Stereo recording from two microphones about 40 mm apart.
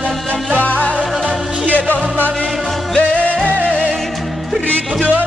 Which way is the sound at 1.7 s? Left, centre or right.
Left.